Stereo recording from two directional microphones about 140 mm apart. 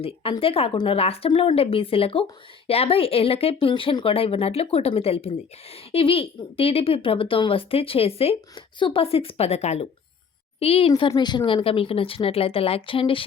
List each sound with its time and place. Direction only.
0.0 s a woman's voice: 40° left (ahead or behind)